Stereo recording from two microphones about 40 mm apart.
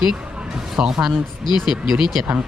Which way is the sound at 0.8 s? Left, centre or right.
Right.